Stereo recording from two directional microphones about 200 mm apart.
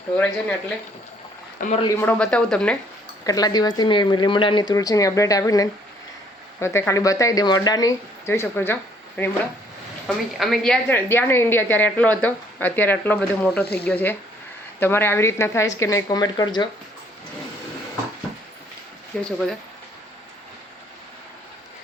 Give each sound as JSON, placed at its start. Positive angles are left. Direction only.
{"t": 1.7, "sound": "speech", "side_deg": 25}
{"t": 2.0, "sound": "speech", "side_deg": 5}
{"t": 3.2, "sound": "a woman's voice", "side_deg": 20}
{"t": 19.2, "sound": "speech", "side_deg": 0}